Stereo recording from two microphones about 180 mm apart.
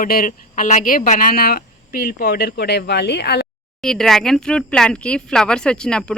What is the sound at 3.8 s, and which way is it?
Speech, 5° left (ahead or behind).